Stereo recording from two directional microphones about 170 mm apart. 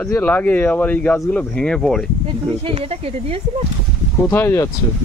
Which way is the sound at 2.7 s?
35° right (ahead or behind).